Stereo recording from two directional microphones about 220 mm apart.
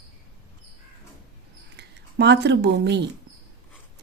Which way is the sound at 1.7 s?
50° right (ahead or behind).